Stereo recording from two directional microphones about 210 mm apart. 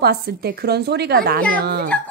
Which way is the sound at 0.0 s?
50° right (ahead or behind).